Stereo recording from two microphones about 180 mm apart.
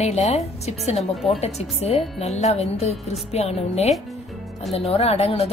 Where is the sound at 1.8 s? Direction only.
35° left (ahead or behind).